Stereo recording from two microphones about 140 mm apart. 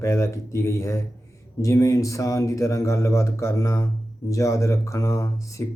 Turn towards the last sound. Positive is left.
turn(degrees=20)  # may be behind; listen again after turning